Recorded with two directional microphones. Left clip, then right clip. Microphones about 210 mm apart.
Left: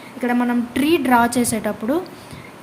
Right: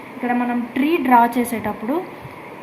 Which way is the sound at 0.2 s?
55° left (ahead or behind).